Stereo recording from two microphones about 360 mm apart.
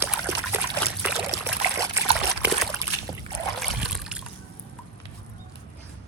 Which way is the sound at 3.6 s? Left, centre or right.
Centre.